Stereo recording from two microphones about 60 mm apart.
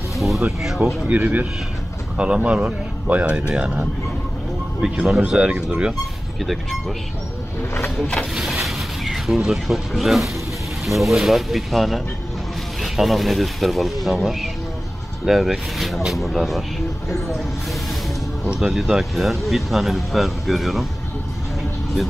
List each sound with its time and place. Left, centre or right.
1.0 s speech: right
4.8 s speech: centre
6.4 s speech: centre
8.0 s speech: centre
8.6 s speech: centre
18.6 s speech: centre